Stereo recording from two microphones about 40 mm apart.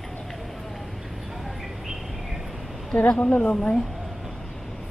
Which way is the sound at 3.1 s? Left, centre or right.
Left.